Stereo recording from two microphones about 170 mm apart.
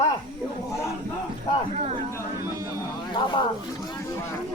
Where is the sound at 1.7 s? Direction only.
40° right (ahead or behind).